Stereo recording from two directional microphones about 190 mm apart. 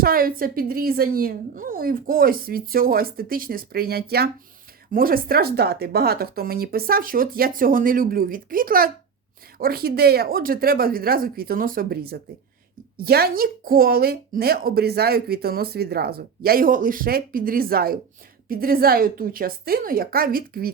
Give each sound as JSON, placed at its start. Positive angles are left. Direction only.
{"t": 0.0, "sound": "speech", "side_deg": -50}